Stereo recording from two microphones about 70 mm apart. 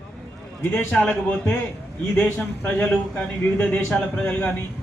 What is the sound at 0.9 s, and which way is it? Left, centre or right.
Speech, centre.